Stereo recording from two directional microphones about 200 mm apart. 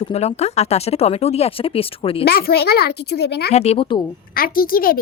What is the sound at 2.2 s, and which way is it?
Speech, 50° left (ahead or behind).